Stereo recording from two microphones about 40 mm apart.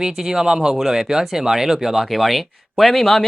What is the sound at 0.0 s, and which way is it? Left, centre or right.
Speech, centre.